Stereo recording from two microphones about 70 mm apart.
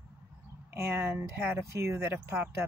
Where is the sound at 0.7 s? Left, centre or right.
Right.